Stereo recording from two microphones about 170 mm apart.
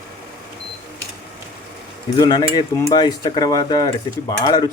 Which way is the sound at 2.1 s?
25° left (ahead or behind).